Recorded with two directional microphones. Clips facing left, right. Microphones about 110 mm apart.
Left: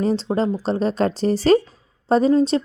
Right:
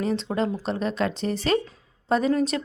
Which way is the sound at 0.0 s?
35° left (ahead or behind).